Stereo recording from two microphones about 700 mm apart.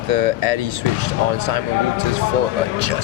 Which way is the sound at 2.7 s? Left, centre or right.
Right.